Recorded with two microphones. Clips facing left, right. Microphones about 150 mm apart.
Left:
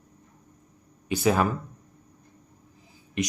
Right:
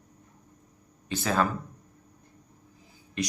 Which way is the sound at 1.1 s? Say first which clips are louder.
Left 4 dB; 15° left (ahead or behind).